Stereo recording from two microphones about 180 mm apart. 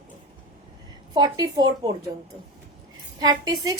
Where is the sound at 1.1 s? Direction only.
20° right (ahead or behind).